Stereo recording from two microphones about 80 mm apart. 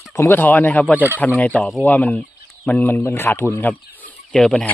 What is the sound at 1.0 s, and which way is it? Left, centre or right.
Speech, right.